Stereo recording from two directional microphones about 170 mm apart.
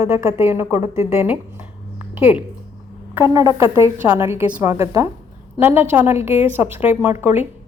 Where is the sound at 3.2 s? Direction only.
15° right (ahead or behind).